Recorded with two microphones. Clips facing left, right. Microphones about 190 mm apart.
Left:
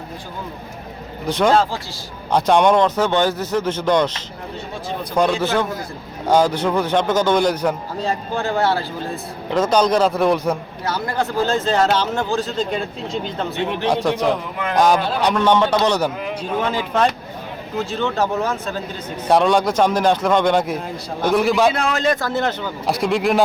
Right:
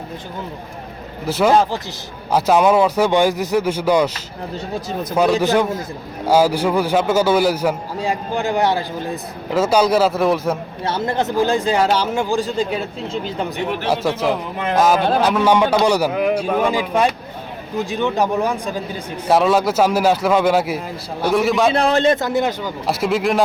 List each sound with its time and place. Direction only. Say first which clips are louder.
1.3 s speech: right 1 dB; 5° right (ahead or behind)
10.8 s speech: right 2 dB; 25° right (ahead or behind); by 21.7 s centre (ahead or behind)
21.7 s a man's voice: right 4 dB; 35° right (ahead or behind)
22.3 s speech: right 2 dB; 15° right (ahead or behind)
22.9 s speech: even; centre (ahead or behind)